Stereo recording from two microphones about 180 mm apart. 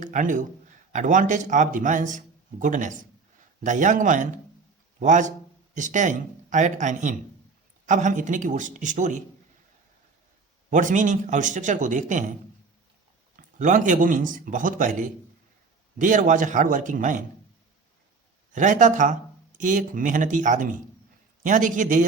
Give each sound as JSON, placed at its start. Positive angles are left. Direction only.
{"t": 0.0, "sound": "a man's voice", "side_deg": -45}
{"t": 10.7, "sound": "a man's voice", "side_deg": -45}
{"t": 13.3, "sound": "a man's voice", "side_deg": -45}
{"t": 18.5, "sound": "a man's voice", "side_deg": -45}